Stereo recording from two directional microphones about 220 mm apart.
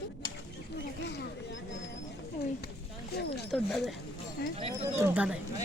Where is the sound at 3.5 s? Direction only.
Centre (ahead or behind).